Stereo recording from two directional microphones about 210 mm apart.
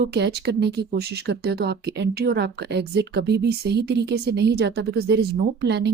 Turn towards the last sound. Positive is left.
turn(degrees=-55)  # may be behind; listen again after turning